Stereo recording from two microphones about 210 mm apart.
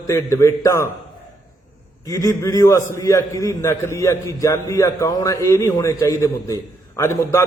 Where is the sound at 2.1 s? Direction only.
15° left (ahead or behind).